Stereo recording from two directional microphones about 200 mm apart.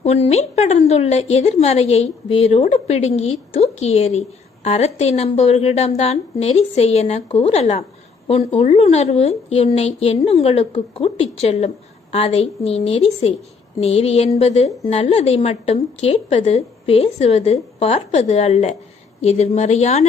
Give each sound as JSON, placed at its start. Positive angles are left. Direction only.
{"t": 0.0, "sound": "a woman's voice", "side_deg": 35}